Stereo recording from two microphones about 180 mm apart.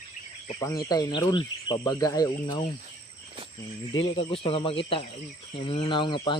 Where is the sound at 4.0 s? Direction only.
30° left (ahead or behind).